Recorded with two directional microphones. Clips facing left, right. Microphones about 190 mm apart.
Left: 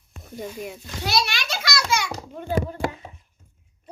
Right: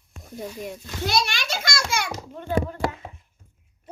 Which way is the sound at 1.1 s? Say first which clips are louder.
Even; 50° right (ahead or behind).